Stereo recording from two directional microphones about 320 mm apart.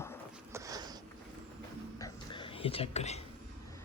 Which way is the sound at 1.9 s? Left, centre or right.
Centre.